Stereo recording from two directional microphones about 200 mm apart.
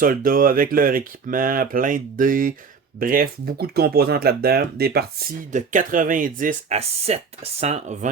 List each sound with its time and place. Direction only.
0.0 s speech: 45° right (ahead or behind)
5.5 s speech: 40° right (ahead or behind)